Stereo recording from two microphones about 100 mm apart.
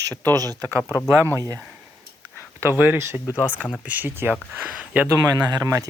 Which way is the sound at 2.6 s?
20° right (ahead or behind).